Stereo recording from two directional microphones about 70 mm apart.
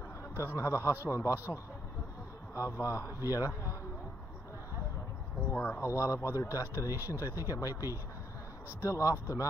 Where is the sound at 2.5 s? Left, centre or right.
Left.